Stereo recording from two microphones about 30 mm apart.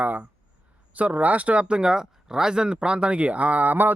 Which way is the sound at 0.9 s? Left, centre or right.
Right.